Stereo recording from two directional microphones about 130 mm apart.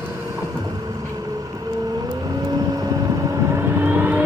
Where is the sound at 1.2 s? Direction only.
25° right (ahead or behind).